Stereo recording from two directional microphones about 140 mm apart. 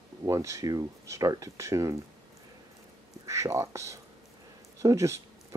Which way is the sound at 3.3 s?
20° right (ahead or behind).